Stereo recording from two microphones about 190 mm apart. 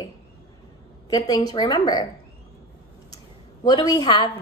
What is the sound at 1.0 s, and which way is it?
A woman's voice, 20° left (ahead or behind).